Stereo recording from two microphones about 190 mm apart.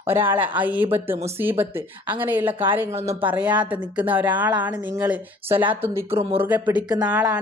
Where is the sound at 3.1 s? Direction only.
25° right (ahead or behind).